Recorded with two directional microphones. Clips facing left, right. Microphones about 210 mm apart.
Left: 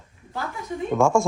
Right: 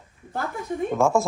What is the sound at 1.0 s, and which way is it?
Speech, centre (ahead or behind).